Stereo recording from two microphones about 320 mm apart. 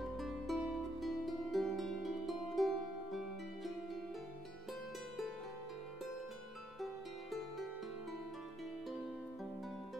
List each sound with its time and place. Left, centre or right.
0.0 s music: centre
6.8 s music: centre